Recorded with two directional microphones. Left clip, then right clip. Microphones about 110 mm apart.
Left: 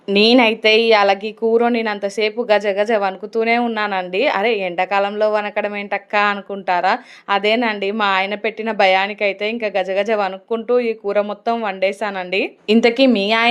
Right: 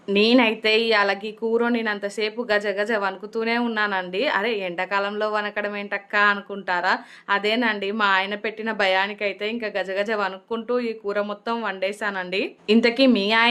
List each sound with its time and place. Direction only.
0.1 s speech: 50° left (ahead or behind)